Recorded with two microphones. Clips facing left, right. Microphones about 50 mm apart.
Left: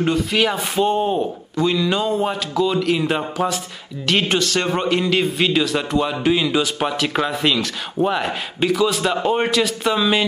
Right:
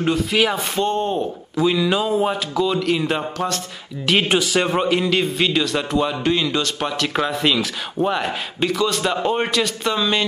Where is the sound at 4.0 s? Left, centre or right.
Centre.